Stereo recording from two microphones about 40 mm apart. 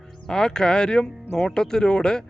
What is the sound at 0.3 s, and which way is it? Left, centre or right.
Speech, centre.